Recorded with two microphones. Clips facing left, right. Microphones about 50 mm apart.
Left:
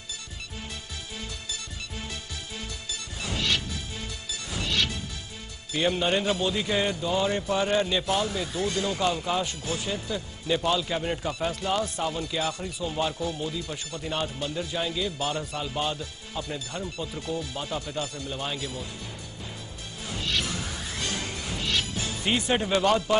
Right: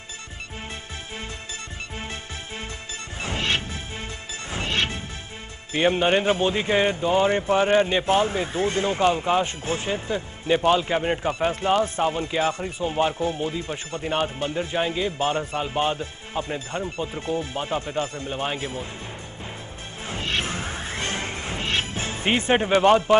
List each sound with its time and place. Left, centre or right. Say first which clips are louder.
3.2 s smash: right 3 dB; right
5.7 s speech: right 5 dB; right
20.1 s music: right 3 dB; right